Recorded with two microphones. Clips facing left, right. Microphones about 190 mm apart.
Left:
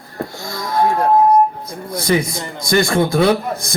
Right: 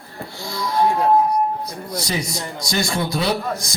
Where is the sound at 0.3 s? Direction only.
45° left (ahead or behind).